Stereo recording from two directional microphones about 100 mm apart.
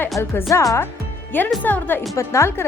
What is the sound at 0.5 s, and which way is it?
Speech, 35° left (ahead or behind).